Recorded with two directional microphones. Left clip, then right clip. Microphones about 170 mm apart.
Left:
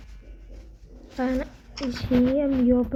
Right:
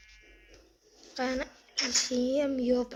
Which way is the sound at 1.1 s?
15° right (ahead or behind).